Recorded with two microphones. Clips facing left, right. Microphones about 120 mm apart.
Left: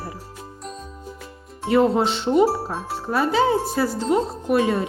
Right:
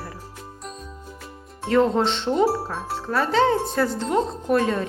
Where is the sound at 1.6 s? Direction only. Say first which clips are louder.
Left 1 dB; 5° left (ahead or behind).